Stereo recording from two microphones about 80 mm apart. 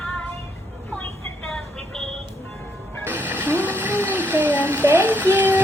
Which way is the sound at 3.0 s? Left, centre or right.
Right.